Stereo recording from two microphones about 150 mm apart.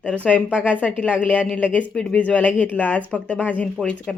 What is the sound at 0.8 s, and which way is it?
Speech, 10° left (ahead or behind).